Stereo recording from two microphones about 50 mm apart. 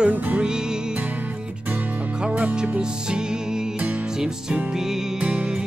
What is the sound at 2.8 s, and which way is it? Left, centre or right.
Music, centre.